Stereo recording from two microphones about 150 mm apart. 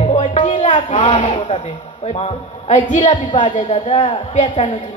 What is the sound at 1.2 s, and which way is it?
A man's voice, 45° left (ahead or behind).